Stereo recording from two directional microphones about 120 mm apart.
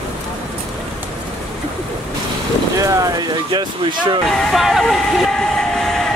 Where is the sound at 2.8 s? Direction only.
30° right (ahead or behind).